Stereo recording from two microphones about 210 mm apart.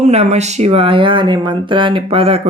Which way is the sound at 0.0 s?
30° right (ahead or behind).